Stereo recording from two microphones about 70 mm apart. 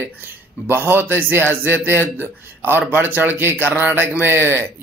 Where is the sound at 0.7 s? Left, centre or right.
Right.